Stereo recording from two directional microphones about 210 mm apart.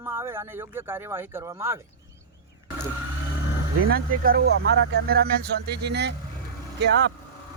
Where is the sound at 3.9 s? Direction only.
45° right (ahead or behind).